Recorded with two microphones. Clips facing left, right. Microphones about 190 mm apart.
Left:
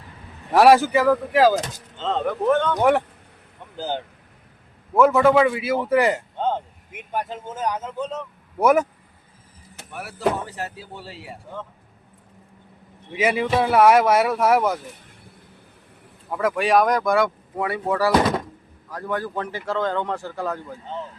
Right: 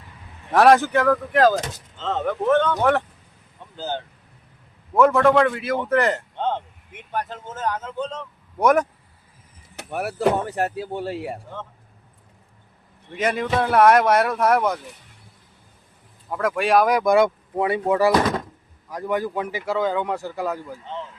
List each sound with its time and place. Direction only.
0.5 s speech: 10° left (ahead or behind)
9.7 s speech: 55° right (ahead or behind)
13.1 s speech: 5° left (ahead or behind)
16.3 s speech: centre (ahead or behind)
17.0 s speech: 20° right (ahead or behind)